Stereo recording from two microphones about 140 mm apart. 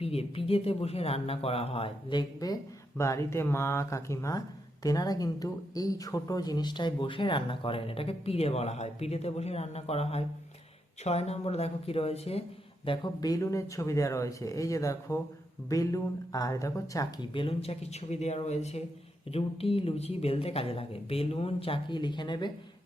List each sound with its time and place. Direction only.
0.0 s speech: 45° left (ahead or behind)
12.8 s speech: 35° left (ahead or behind)
17.3 s speech: 45° left (ahead or behind)